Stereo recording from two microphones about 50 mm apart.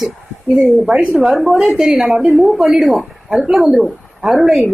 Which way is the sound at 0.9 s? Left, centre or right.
Right.